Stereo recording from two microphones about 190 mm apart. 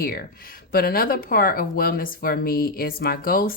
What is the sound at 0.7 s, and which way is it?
Speech, 50° left (ahead or behind).